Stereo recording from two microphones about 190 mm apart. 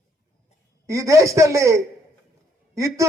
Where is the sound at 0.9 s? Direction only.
15° right (ahead or behind).